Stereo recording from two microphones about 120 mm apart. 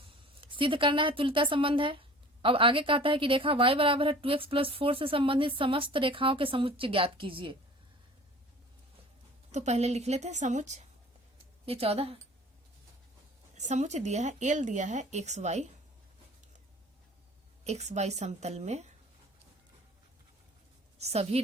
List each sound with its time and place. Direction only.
0.4 s speech: 45° right (ahead or behind)
9.5 s speech: 65° right (ahead or behind)
11.6 s speech: 55° right (ahead or behind)
13.6 s speech: 75° right (ahead or behind)
17.6 s speech: 70° right (ahead or behind)
21.0 s a woman's voice: 60° right (ahead or behind)